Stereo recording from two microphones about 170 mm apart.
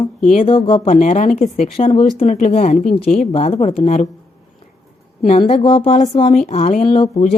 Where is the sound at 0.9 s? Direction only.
45° left (ahead or behind).